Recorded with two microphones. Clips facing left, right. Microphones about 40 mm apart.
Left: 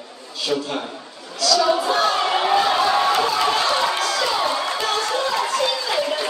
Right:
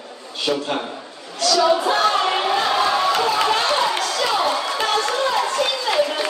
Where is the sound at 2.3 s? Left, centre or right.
Centre.